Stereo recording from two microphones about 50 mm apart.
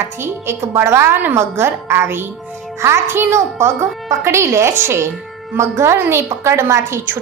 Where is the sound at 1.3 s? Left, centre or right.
Right.